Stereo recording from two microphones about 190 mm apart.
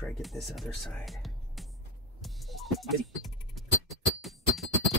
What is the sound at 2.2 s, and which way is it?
Music, centre (ahead or behind).